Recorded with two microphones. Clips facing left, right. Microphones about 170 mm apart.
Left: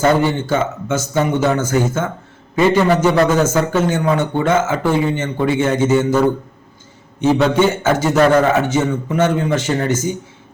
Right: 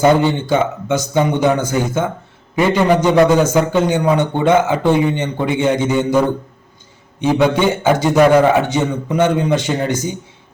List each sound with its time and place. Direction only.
0.0 s a man's voice: 15° right (ahead or behind)